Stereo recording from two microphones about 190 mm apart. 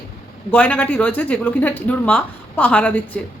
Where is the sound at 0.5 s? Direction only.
10° left (ahead or behind).